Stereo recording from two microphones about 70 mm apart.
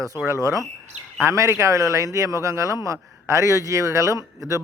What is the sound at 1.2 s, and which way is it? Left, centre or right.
A man's voice, right.